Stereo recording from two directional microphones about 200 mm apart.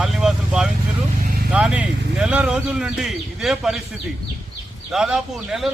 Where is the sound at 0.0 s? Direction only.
Centre (ahead or behind).